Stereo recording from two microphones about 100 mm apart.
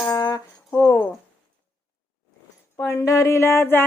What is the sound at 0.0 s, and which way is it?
Music, 40° left (ahead or behind).